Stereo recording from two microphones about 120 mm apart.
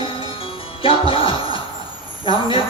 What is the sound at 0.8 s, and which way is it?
A man's voice, 50° left (ahead or behind).